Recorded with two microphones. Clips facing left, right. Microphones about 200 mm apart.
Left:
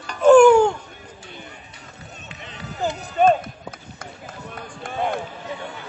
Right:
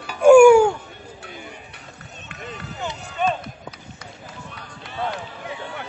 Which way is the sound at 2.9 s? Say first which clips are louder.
Left 7 dB; 50° left (ahead or behind).